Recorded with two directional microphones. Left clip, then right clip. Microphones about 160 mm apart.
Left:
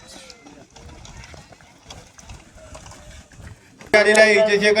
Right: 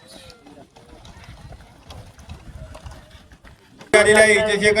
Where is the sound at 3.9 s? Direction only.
60° left (ahead or behind).